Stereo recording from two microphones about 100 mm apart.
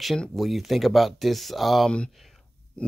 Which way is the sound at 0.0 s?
Centre (ahead or behind).